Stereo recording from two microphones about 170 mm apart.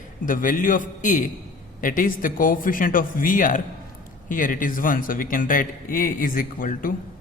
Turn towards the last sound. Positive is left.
turn(degrees=55)  # may be behind; listen again after turning